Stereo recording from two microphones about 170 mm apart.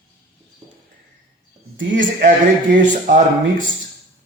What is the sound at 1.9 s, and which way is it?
Speech, 50° right (ahead or behind).